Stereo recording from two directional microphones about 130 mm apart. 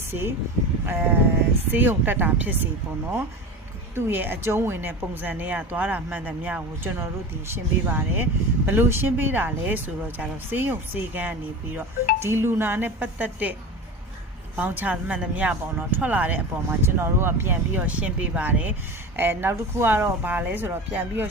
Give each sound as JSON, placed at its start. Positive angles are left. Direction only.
{"t": 0.1, "sound": "speech", "side_deg": -15}
{"t": 3.9, "sound": "speech", "side_deg": -15}